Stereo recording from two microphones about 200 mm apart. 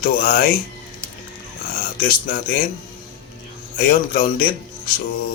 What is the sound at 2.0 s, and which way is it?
Speech, 45° left (ahead or behind).